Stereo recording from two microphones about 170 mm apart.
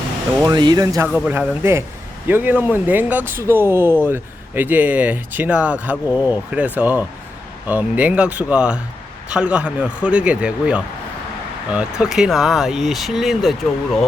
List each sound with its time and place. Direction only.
0.4 s speech: 25° right (ahead or behind)
1.0 s speech: 10° right (ahead or behind)